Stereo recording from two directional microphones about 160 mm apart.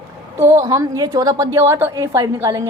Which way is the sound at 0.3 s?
20° right (ahead or behind).